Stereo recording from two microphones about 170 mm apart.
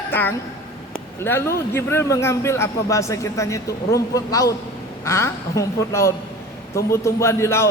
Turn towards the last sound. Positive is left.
turn(degrees=15)  # may be behind; listen again after turning